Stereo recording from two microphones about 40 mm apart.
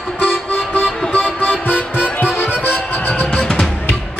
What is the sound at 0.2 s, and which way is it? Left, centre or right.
Music, left.